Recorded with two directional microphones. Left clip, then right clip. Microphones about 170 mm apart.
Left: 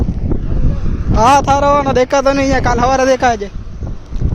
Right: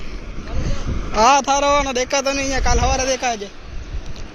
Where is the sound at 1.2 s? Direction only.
40° left (ahead or behind).